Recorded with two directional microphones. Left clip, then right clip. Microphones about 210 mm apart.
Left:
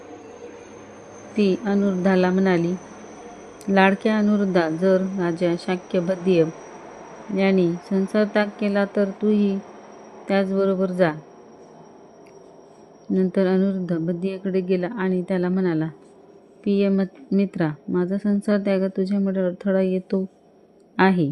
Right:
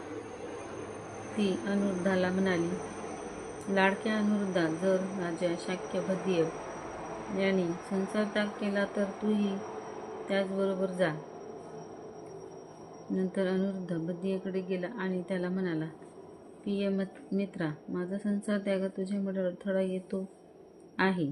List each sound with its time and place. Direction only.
1.4 s speech: 50° left (ahead or behind)
3.8 s speech: 50° left (ahead or behind)
13.1 s speech: 50° left (ahead or behind)